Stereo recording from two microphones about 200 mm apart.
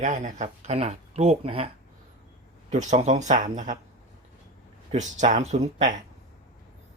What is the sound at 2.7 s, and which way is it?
Speech, 35° right (ahead or behind).